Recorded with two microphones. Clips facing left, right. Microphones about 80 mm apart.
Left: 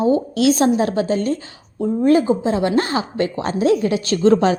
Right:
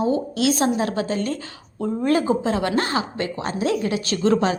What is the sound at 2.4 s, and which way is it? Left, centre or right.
Speech, centre.